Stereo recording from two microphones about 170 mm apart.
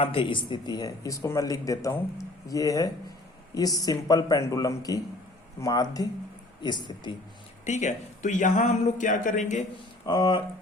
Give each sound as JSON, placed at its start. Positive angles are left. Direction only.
{"t": 0.0, "sound": "speech", "side_deg": 30}
{"t": 7.6, "sound": "speech", "side_deg": 40}
{"t": 10.1, "sound": "speech", "side_deg": 25}